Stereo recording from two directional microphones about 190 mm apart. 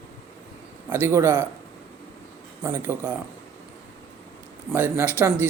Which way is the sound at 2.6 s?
15° right (ahead or behind).